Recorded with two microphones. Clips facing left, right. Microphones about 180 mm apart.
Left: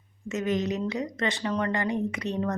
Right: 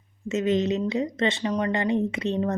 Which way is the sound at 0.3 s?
25° right (ahead or behind).